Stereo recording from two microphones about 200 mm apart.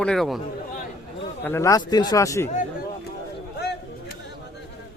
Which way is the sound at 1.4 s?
15° left (ahead or behind).